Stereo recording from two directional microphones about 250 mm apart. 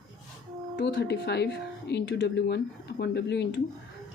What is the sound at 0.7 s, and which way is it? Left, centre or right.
Speech, left.